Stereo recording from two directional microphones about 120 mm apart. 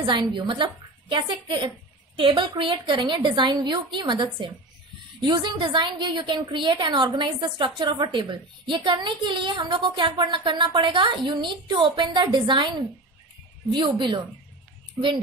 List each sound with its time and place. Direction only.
0.0 s a woman's voice: 40° right (ahead or behind)